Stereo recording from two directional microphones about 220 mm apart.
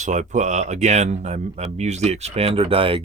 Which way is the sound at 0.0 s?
35° right (ahead or behind).